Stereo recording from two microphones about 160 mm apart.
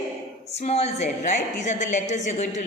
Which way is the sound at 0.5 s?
40° left (ahead or behind).